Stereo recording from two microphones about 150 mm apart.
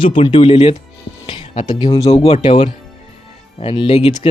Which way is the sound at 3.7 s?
35° left (ahead or behind).